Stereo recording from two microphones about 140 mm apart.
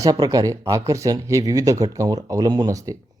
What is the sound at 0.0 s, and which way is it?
Speech, 25° right (ahead or behind).